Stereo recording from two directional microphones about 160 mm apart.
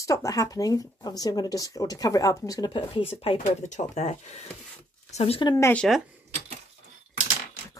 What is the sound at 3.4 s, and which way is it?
Speech, 50° left (ahead or behind).